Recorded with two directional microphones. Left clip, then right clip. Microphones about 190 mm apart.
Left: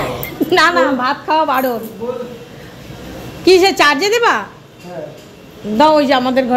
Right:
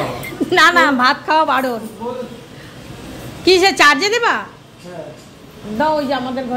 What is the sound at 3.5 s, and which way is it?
Speech, 10° left (ahead or behind).